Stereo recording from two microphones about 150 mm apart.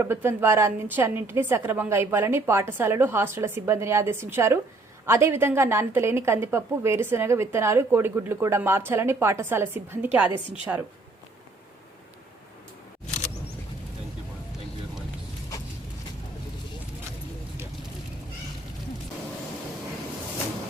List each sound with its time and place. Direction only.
0.0 s a woman's voice: 15° right (ahead or behind)
13.1 s single-lens reflex camera: 50° left (ahead or behind)